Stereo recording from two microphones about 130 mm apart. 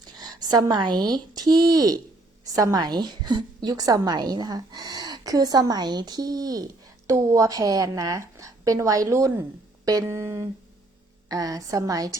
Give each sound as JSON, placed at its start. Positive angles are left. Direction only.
{"t": 0.2, "sound": "a woman's voice", "side_deg": -30}